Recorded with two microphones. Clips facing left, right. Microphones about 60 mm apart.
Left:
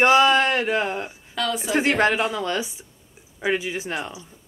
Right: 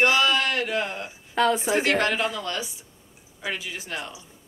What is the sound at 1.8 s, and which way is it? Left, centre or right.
Speech, left.